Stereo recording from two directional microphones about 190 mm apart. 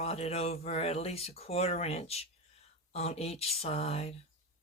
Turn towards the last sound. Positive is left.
turn(degrees=35)  # may be behind; listen again after turning